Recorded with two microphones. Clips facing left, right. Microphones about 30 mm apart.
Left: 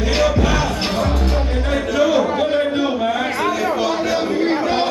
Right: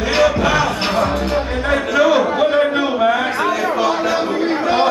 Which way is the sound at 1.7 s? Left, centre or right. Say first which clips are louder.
Right 3 dB; centre.